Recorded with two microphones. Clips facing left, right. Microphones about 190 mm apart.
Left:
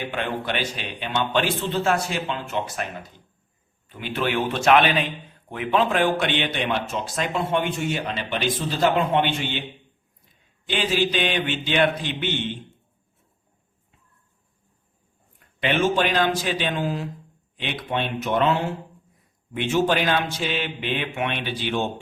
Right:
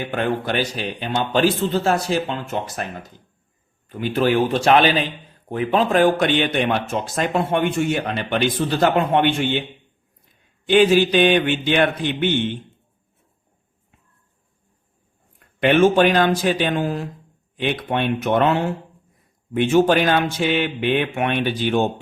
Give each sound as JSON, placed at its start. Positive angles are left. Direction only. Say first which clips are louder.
{"t": 0.1, "sound": "a man's voice", "louder": "right 8 dB", "side_deg": -45}
{"t": 3.8, "sound": "a man's voice", "louder": "right 7 dB", "side_deg": -40}
{"t": 10.7, "sound": "speech", "louder": "right 9 dB", "side_deg": -55}
{"t": 15.6, "sound": "speech", "louder": "right 7 dB", "side_deg": -55}